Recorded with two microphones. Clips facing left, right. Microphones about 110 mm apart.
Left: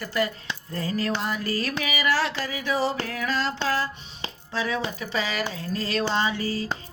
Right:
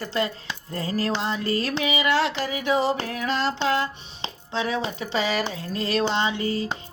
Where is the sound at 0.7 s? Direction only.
30° right (ahead or behind).